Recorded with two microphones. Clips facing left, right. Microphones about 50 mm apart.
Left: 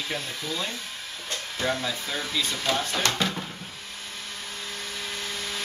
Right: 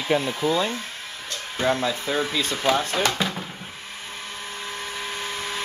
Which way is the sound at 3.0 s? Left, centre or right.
Centre.